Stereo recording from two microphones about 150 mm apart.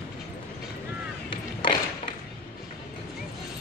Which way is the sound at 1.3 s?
35° left (ahead or behind).